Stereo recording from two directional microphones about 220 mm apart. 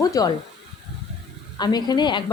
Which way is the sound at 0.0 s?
15° left (ahead or behind).